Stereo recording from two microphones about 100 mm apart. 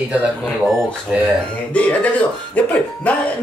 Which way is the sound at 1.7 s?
15° left (ahead or behind).